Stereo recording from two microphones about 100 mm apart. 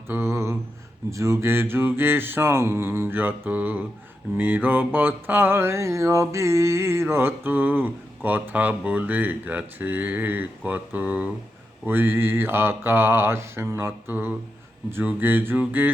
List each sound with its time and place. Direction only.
0.1 s mantra: 25° right (ahead or behind)